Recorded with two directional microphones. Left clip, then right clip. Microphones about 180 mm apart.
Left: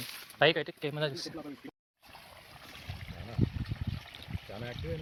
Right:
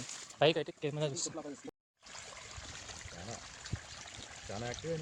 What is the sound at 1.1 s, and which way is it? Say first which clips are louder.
Speech: even; 15° right (ahead or behind).